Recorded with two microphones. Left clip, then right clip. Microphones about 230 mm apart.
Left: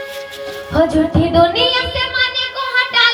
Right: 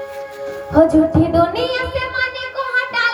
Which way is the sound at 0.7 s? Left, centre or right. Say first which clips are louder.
Right 2 dB; right.